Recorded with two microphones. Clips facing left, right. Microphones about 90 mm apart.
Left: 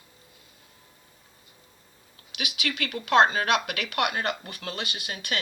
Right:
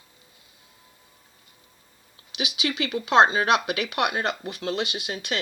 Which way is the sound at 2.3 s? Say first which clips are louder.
Right 4 dB; 25° right (ahead or behind).